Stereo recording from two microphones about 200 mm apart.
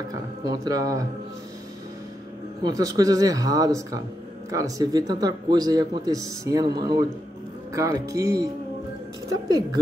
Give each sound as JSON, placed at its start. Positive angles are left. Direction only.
{"t": 0.1, "sound": "speech", "side_deg": -15}
{"t": 2.6, "sound": "a man's voice", "side_deg": -15}